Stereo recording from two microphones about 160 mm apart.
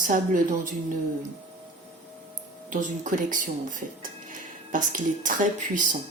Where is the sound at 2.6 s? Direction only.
55° right (ahead or behind).